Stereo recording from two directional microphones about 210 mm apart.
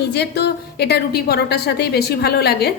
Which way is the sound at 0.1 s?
50° left (ahead or behind).